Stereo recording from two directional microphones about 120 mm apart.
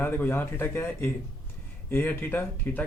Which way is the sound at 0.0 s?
20° left (ahead or behind).